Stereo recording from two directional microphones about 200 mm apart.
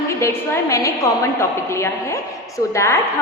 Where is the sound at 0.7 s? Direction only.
15° left (ahead or behind).